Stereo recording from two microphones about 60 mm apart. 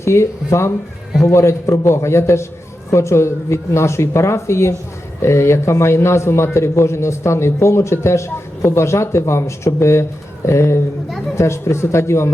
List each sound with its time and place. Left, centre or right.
0.0 s a man's voice: left